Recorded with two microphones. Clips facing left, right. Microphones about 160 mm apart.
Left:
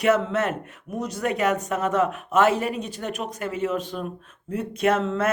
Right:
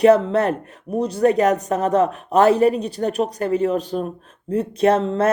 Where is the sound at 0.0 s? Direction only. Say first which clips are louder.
Right 7 dB; 35° right (ahead or behind).